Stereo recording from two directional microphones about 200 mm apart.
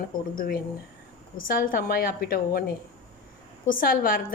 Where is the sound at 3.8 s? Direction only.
45° left (ahead or behind).